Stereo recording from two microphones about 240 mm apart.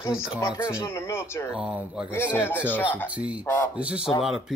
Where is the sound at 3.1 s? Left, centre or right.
Centre.